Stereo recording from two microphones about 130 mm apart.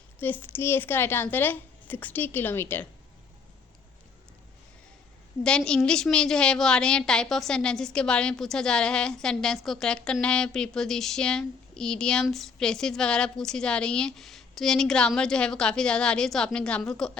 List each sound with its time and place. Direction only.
0.2 s a woman's voice: 15° left (ahead or behind)
5.4 s a woman's voice: 5° left (ahead or behind)